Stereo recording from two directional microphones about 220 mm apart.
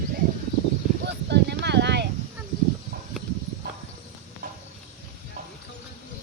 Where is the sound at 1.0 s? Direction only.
50° right (ahead or behind).